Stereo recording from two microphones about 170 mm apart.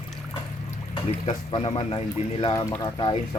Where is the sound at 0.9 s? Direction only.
35° left (ahead or behind).